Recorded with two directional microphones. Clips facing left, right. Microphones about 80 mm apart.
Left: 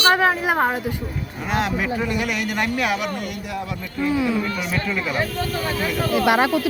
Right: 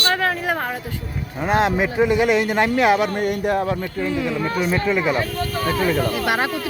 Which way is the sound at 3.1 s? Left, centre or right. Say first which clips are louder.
Right 8 dB; right.